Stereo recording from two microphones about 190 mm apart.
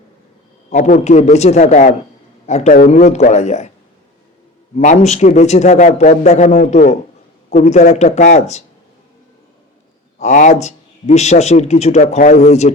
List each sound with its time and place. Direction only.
0.7 s a man's voice: 40° left (ahead or behind)
4.8 s a man's voice: 40° left (ahead or behind)
10.2 s a man's voice: 40° left (ahead or behind)